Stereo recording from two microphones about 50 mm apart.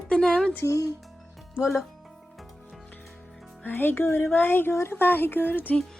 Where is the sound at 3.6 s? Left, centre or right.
Left.